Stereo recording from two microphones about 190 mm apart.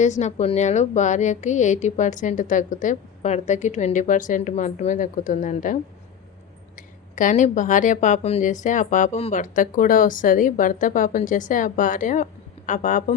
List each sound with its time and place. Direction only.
0.0 s a woman's voice: 40° left (ahead or behind)